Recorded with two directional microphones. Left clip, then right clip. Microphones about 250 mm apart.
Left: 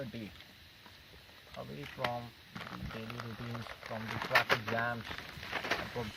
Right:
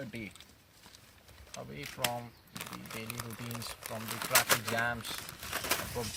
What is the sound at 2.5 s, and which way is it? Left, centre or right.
Speech, right.